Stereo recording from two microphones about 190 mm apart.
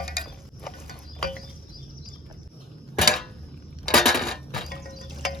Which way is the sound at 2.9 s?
Centre (ahead or behind).